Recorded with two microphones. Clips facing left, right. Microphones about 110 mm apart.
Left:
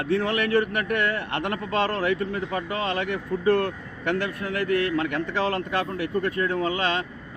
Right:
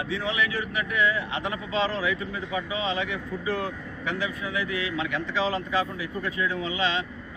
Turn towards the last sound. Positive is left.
turn(degrees=50)  # may be behind; listen again after turning